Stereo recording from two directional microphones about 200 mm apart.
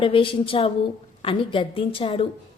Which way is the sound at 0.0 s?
25° left (ahead or behind).